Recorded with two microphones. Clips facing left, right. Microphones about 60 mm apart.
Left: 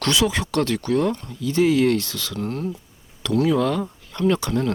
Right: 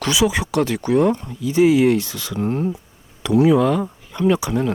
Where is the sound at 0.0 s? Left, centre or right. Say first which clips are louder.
Right 2 dB; centre.